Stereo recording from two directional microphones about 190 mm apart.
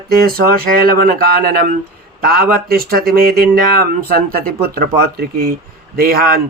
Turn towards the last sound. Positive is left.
turn(degrees=-50)  # may be behind; listen again after turning